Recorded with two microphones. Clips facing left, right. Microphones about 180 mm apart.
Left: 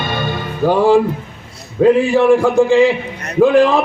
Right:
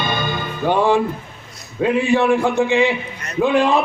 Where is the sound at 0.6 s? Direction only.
35° left (ahead or behind).